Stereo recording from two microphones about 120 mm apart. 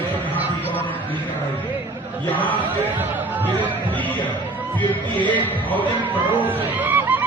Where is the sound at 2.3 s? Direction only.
15° left (ahead or behind).